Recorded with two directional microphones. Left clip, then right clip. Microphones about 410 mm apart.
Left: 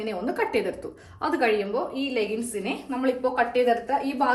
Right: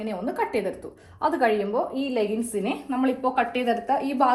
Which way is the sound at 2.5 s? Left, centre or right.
Centre.